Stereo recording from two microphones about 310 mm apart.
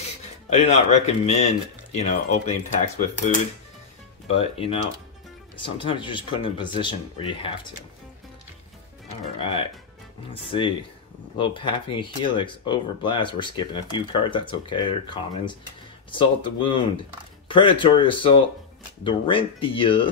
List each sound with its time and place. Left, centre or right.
0.5 s speech: left
4.3 s speech: centre
9.4 s speech: centre